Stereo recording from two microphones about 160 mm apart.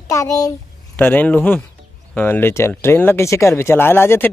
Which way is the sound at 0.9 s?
10° left (ahead or behind).